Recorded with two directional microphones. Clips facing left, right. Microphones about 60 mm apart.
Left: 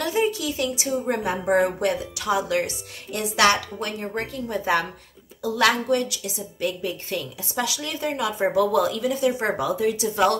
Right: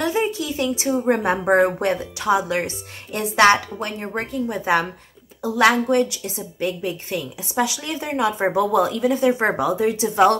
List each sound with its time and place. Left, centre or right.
0.0 s a woman's voice: right
1.2 s speech: right
1.8 s a woman's voice: right